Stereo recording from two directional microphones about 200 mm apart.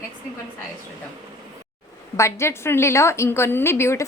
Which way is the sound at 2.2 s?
15° left (ahead or behind).